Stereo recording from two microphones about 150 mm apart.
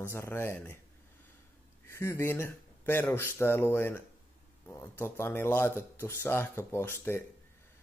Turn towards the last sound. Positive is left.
turn(degrees=15)  # may be behind; listen again after turning